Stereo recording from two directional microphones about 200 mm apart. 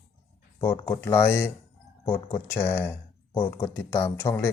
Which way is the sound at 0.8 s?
10° left (ahead or behind).